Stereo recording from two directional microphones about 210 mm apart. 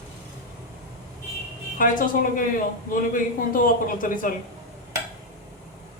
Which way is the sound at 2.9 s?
40° left (ahead or behind).